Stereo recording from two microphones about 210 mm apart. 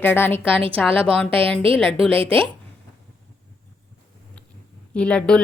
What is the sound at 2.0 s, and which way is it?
Speech, 25° right (ahead or behind).